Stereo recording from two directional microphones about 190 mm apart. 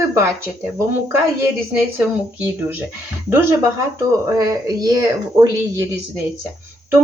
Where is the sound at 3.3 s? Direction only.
10° right (ahead or behind).